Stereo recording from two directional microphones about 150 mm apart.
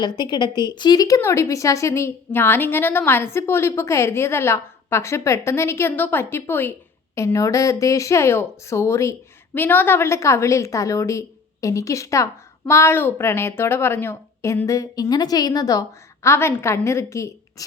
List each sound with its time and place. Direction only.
0.0 s a woman's voice: 30° left (ahead or behind)